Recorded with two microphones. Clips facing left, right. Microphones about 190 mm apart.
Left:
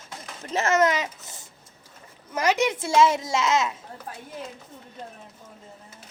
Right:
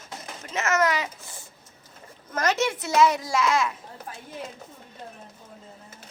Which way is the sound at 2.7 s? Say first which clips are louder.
Left 1 dB; 30° left (ahead or behind).